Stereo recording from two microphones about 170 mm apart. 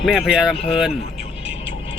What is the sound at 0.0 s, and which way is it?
Speech, 5° right (ahead or behind).